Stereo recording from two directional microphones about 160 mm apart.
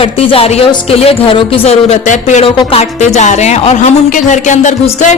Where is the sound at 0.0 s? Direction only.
35° left (ahead or behind).